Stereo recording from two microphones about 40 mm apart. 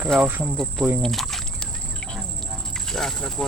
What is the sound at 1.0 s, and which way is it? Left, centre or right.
Speech, centre.